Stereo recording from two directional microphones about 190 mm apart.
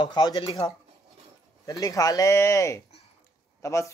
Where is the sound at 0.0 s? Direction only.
25° left (ahead or behind).